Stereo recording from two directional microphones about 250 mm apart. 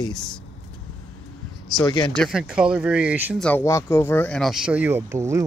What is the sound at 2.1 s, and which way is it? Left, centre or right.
Speech, centre.